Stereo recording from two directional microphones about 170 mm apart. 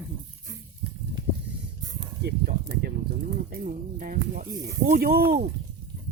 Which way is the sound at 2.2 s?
70° right (ahead or behind).